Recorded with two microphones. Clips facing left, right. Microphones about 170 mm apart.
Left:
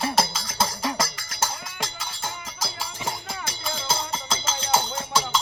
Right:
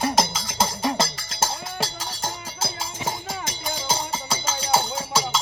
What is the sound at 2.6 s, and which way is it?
Music, 20° right (ahead or behind).